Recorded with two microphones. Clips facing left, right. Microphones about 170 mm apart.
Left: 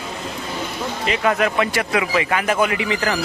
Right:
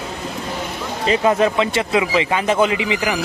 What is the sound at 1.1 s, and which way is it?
A man's voice, 25° right (ahead or behind).